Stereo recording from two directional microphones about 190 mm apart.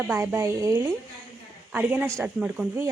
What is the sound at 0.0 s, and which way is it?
Speech, 10° right (ahead or behind).